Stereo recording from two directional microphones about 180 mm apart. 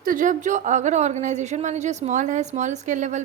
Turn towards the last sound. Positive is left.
turn(degrees=-40)  # may be behind; listen again after turning